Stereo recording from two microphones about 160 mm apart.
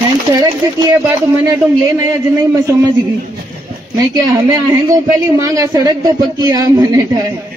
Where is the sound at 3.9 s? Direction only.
25° right (ahead or behind).